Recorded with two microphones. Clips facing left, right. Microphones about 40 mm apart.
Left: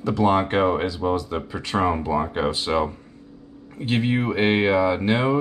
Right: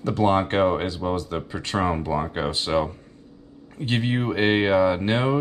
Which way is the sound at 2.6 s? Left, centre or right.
Left.